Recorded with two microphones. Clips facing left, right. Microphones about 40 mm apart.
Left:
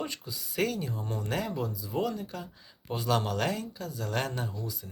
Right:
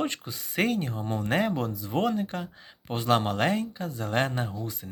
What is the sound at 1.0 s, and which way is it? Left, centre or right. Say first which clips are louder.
Speech: right 8 dB; right.